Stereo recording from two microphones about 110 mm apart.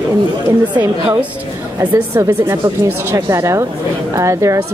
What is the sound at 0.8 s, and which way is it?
Speech, 30° right (ahead or behind).